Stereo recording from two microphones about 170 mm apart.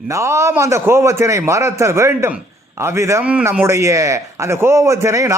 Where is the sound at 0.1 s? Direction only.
15° right (ahead or behind).